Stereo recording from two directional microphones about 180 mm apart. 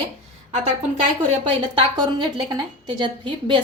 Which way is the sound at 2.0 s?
25° right (ahead or behind).